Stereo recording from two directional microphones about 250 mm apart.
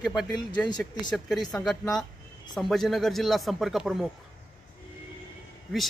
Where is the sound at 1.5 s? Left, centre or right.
Centre.